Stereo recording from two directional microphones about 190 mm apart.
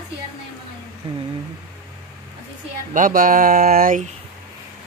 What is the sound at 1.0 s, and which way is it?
Speech, 30° right (ahead or behind).